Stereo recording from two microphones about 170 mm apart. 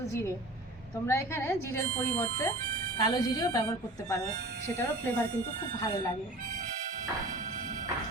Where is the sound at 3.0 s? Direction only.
25° left (ahead or behind).